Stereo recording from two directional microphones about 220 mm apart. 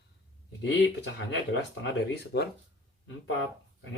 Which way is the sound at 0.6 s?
50° left (ahead or behind).